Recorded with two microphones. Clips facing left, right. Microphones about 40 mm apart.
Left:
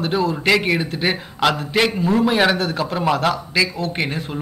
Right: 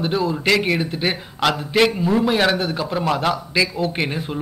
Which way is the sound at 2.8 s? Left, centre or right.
Centre.